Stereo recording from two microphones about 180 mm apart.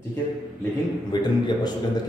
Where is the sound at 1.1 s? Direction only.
25° left (ahead or behind).